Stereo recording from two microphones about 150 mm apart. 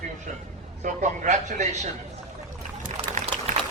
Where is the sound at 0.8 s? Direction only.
55° right (ahead or behind).